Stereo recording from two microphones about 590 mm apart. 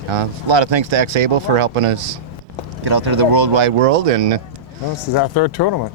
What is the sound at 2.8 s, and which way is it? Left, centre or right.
Speech, right.